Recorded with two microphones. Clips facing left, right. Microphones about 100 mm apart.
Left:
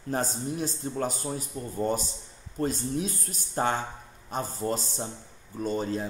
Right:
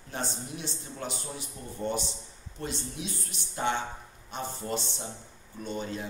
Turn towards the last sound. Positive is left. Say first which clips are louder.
# left 6 dB
turn(degrees=40)  # may be behind; listen again after turning